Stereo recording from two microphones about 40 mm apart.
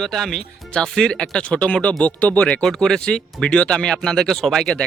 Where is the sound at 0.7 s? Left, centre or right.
Centre; by 2.6 s left.